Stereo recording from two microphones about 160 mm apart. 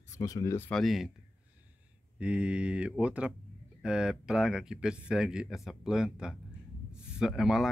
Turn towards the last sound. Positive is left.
turn(degrees=0)  # may be behind; listen again after turning